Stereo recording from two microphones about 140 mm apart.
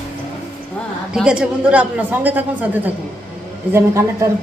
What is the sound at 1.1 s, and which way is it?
A woman's voice, 5° right (ahead or behind).